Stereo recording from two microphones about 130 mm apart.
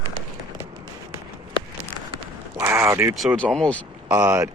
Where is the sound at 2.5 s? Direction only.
20° right (ahead or behind).